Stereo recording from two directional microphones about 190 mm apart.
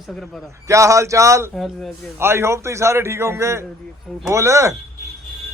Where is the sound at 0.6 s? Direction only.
15° right (ahead or behind).